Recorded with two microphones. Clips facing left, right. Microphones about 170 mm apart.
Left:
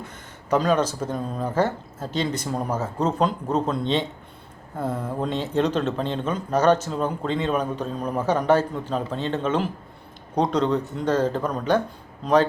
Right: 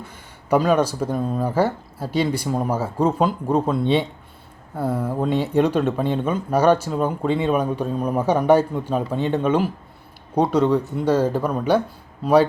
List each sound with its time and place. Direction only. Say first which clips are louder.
0.1 s speech: right 4 dB; 10° right (ahead or behind)